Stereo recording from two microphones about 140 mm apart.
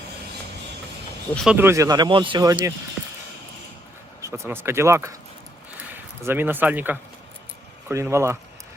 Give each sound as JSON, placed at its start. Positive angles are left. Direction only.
{"t": 1.5, "sound": "speech", "side_deg": -15}
{"t": 3.0, "sound": "a sound", "side_deg": 0}
{"t": 4.2, "sound": "speech", "side_deg": -20}